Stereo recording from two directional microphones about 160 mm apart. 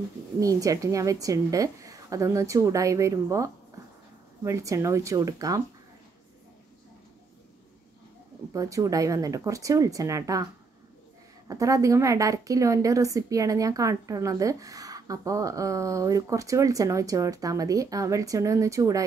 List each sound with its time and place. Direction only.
0.4 s a woman's voice: 20° right (ahead or behind)
8.5 s a woman's voice: 20° right (ahead or behind)